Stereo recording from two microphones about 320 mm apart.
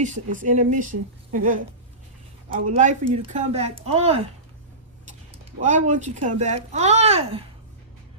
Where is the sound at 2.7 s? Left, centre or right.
Right.